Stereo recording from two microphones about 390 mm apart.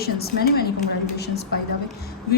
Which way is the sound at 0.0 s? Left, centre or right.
Left.